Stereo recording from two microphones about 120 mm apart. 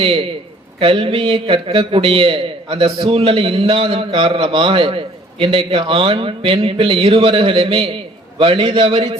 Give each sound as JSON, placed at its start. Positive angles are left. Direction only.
{"t": 0.0, "sound": "a man's voice", "side_deg": -50}